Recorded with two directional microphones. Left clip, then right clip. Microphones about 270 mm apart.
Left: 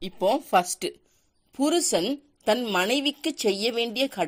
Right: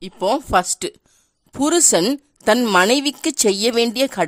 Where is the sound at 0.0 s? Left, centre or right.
Right.